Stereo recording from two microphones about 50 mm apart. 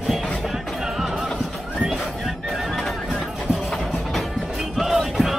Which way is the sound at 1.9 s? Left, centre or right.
Centre.